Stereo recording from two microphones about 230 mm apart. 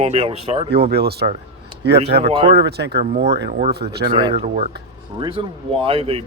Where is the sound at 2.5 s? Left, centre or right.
Right.